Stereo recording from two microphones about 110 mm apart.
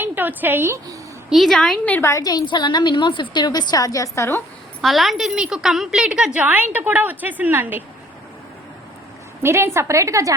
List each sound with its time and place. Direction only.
0.0 s a woman's voice: 15° right (ahead or behind)
1.3 s a woman's voice: centre (ahead or behind)
1.9 s a woman's voice: 25° left (ahead or behind)
2.2 s a woman's voice: 40° left (ahead or behind); by 4.4 s 25° left (ahead or behind)
4.8 s a woman's voice: centre (ahead or behind); by 7.9 s 15° right (ahead or behind)
9.4 s a woman's voice: 20° right (ahead or behind)